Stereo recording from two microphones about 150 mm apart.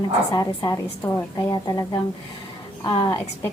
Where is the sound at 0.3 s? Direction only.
25° left (ahead or behind).